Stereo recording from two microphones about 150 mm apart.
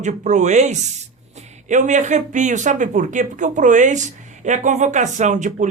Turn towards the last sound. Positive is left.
turn(degrees=-55)  # may be behind; listen again after turning